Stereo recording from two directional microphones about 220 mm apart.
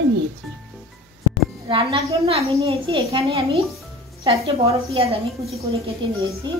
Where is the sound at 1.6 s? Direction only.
25° right (ahead or behind).